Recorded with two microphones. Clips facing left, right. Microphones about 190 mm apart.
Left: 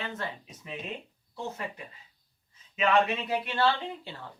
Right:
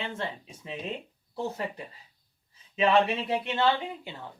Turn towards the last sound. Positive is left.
turn(degrees=-15)  # may be behind; listen again after turning